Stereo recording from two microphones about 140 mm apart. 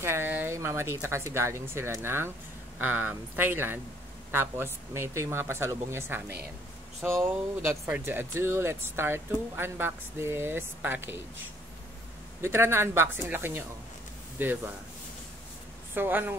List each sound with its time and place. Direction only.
0.0 s speech: 15° right (ahead or behind)
12.4 s speech: 20° right (ahead or behind)
15.9 s speech: 15° right (ahead or behind)